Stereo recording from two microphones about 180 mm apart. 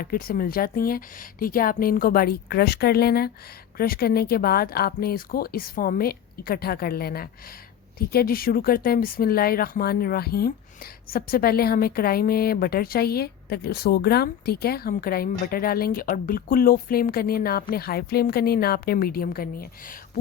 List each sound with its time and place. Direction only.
0.0 s speech: 55° left (ahead or behind)